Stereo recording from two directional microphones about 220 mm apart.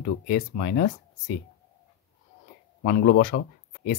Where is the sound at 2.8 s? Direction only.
45° left (ahead or behind).